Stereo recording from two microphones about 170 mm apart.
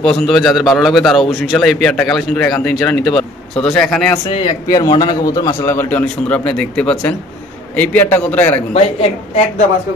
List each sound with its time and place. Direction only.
0.0 s a man's voice: centre (ahead or behind)
4.4 s a man's voice: 20° left (ahead or behind)